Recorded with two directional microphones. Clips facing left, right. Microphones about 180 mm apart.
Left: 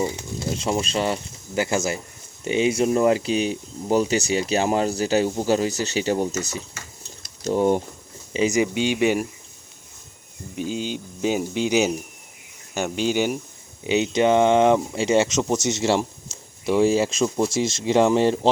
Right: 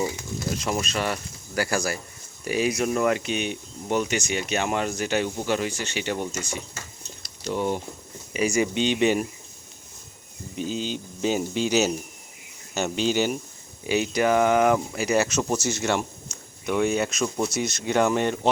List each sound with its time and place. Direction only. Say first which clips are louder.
0.2 s speech: left 2 dB; 30° left (ahead or behind)
8.3 s speech: left 3 dB; 20° left (ahead or behind)
10.6 s speech: left 2 dB; 15° left (ahead or behind); by 18.5 s 30° left (ahead or behind)